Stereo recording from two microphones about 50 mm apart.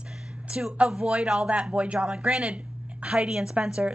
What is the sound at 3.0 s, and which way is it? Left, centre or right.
Speech, centre.